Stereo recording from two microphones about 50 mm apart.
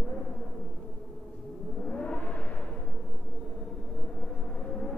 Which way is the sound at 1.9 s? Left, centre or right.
Left.